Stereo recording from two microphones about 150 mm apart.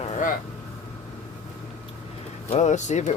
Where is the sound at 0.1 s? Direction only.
60° left (ahead or behind).